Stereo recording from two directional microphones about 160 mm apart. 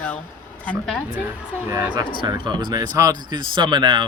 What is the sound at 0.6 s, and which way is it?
Speech, 5° left (ahead or behind).